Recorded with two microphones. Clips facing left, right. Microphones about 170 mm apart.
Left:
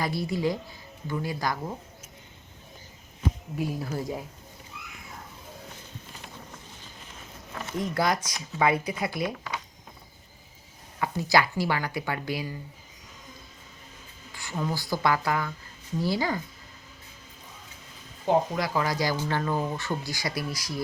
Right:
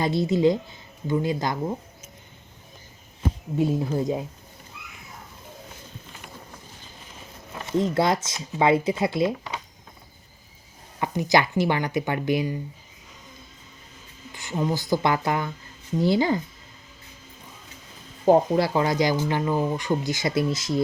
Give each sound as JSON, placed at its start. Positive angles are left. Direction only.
{"t": 0.0, "sound": "speech", "side_deg": -20}
{"t": 3.6, "sound": "speech", "side_deg": -25}
{"t": 7.5, "sound": "speech", "side_deg": -20}
{"t": 11.0, "sound": "speech", "side_deg": -20}
{"t": 14.3, "sound": "speech", "side_deg": -20}
{"t": 18.3, "sound": "speech", "side_deg": -30}